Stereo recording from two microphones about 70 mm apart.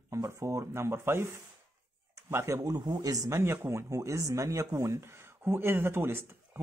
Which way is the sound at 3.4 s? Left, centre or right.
Right.